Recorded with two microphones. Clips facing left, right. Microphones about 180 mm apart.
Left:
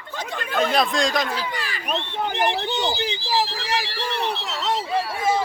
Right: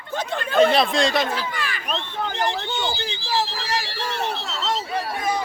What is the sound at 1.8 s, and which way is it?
Speech, 15° left (ahead or behind).